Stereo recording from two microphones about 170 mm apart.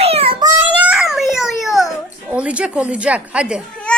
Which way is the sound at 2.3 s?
5° right (ahead or behind).